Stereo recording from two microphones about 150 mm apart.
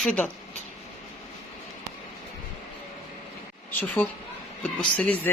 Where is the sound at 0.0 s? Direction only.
10° left (ahead or behind).